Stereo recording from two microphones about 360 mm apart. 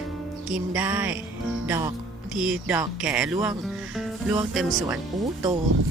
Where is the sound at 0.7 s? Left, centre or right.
Centre.